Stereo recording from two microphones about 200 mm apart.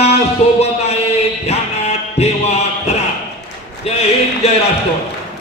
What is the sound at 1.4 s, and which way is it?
Music, 30° left (ahead or behind).